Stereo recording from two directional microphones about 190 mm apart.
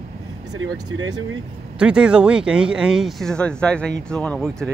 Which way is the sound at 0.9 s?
90° right.